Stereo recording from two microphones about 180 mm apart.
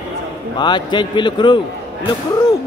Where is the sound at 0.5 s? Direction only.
25° left (ahead or behind).